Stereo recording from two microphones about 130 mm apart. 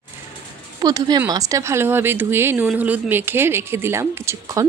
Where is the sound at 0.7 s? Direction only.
30° right (ahead or behind).